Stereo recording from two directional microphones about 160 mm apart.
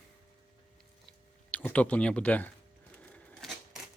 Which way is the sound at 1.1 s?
10° left (ahead or behind).